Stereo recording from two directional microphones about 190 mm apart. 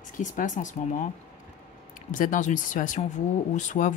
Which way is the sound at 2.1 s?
45° left (ahead or behind).